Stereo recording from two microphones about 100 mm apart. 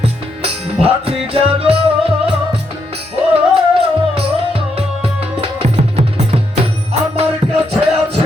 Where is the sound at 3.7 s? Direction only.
75° right (ahead or behind).